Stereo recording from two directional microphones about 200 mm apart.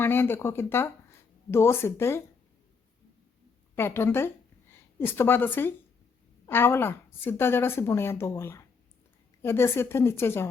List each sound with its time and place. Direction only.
0.0 s speech: 10° left (ahead or behind)
3.8 s a woman's voice: 10° left (ahead or behind)